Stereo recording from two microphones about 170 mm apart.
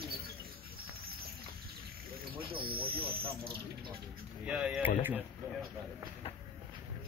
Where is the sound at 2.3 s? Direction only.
30° right (ahead or behind).